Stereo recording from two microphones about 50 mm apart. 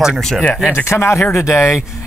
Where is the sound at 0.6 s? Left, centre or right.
Left.